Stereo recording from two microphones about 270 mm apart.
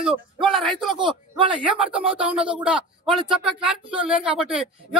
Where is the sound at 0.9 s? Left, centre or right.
Centre.